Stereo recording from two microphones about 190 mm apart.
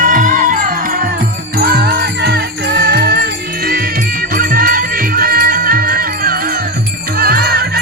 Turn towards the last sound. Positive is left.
turn(degrees=-55)  # may be behind; listen again after turning